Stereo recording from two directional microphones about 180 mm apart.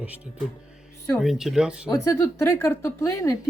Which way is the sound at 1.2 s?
Centre (ahead or behind).